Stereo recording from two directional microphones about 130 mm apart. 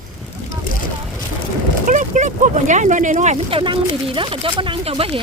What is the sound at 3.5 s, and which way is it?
Speech, 45° right (ahead or behind).